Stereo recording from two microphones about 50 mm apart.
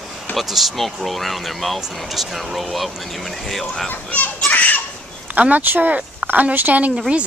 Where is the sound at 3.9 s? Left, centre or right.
Left.